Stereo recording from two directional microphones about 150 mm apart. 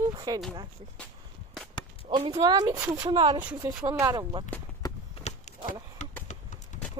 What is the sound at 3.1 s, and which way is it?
Speech, 35° right (ahead or behind).